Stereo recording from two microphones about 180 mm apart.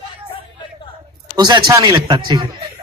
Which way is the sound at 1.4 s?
25° right (ahead or behind).